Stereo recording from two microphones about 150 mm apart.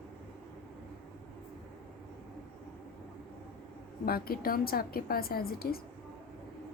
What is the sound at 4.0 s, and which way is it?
A woman's voice, 85° left.